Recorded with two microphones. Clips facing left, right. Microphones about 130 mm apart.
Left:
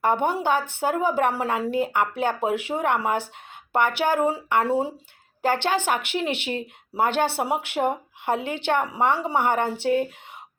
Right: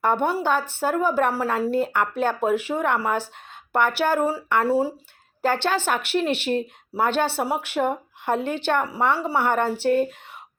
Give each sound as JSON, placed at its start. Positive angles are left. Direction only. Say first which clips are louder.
{"t": 0.0, "sound": "speech", "louder": "even", "side_deg": 15}